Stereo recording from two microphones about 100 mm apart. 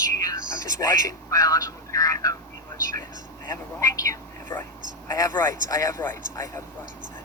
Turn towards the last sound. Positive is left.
turn(degrees=30)  # may be behind; listen again after turning